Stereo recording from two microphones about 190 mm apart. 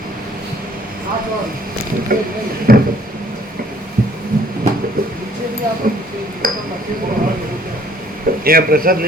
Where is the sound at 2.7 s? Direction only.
50° right (ahead or behind).